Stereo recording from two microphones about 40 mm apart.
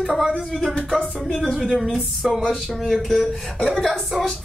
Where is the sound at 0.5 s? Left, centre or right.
Centre.